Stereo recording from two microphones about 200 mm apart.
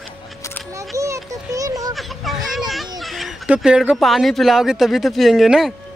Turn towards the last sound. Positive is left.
turn(degrees=0)  # may be behind; listen again after turning